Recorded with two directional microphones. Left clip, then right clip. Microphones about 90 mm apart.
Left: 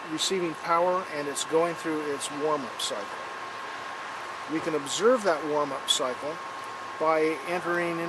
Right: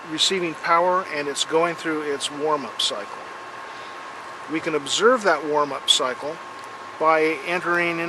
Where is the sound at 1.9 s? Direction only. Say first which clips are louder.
Right 5 dB; 30° right (ahead or behind).